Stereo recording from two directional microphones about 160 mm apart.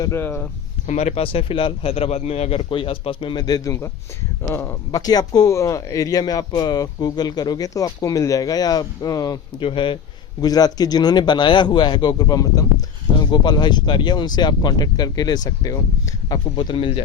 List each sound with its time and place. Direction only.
0.0 s speech: 15° left (ahead or behind)
0.9 s a man's voice: 45° left (ahead or behind)